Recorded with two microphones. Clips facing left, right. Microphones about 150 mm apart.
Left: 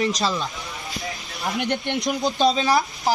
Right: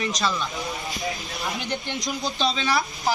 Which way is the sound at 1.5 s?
60° left (ahead or behind).